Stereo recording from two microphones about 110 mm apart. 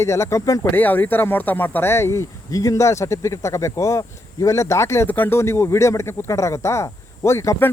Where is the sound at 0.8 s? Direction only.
15° left (ahead or behind).